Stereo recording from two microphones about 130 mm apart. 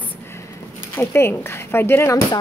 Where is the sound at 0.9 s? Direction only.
20° left (ahead or behind).